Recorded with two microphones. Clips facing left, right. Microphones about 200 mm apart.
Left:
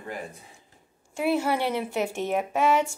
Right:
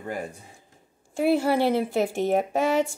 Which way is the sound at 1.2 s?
35° right (ahead or behind).